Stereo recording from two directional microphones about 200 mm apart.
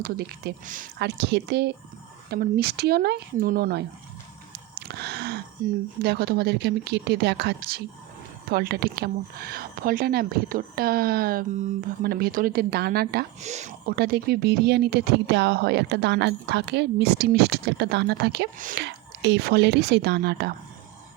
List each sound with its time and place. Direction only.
0.0 s speech: 50° right (ahead or behind)
0.9 s speech: 55° right (ahead or behind)
13.4 s speech: 35° right (ahead or behind)
13.9 s speech: 55° right (ahead or behind)